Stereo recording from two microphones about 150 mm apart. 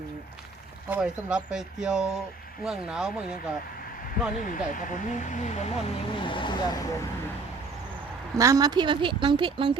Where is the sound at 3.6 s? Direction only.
75° left (ahead or behind).